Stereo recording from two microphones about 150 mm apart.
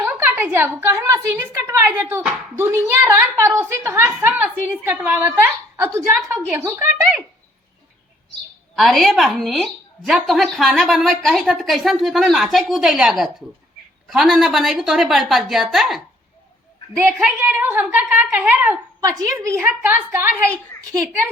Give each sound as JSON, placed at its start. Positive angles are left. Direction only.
{"t": 0.0, "sound": "a woman's voice", "side_deg": -15}
{"t": 8.7, "sound": "a woman's voice", "side_deg": 0}
{"t": 17.0, "sound": "a woman's voice", "side_deg": -10}
{"t": 18.9, "sound": "a woman's voice", "side_deg": -25}
{"t": 19.4, "sound": "a woman's voice", "side_deg": -15}